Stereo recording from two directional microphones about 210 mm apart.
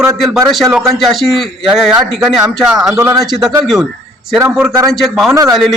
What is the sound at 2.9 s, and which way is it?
Speech, 15° right (ahead or behind).